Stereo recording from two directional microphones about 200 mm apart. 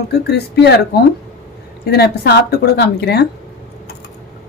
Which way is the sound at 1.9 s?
55° left (ahead or behind).